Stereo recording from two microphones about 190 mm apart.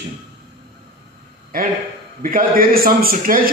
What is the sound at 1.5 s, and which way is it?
Speech, 50° right (ahead or behind).